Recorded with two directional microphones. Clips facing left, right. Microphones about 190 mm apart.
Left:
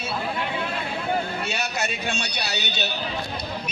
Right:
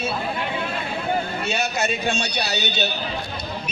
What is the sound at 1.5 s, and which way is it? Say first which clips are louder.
A man's voice: right 4 dB; 25° right (ahead or behind).